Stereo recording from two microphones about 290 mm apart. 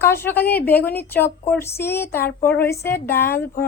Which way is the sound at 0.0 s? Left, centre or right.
Centre.